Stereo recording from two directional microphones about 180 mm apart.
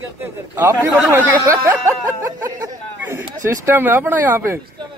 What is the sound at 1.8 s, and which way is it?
Music, 20° right (ahead or behind).